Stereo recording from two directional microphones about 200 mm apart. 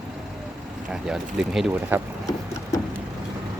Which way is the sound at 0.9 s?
Centre (ahead or behind).